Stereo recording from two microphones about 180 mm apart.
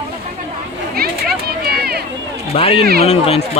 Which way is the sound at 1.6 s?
60° right (ahead or behind).